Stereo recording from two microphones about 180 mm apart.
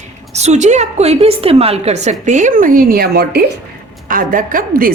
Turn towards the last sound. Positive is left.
turn(degrees=-50)  # may be behind; listen again after turning